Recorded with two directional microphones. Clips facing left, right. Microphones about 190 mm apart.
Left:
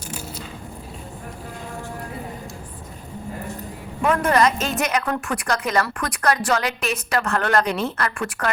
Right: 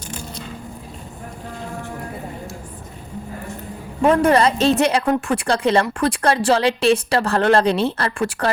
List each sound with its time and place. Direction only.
4.0 s a woman's voice: 30° right (ahead or behind)